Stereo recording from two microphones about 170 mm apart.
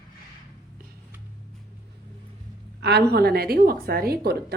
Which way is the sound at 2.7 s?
80° right.